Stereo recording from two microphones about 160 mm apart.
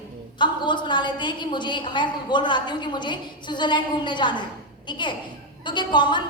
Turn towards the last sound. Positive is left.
turn(degrees=30)  # may be behind; listen again after turning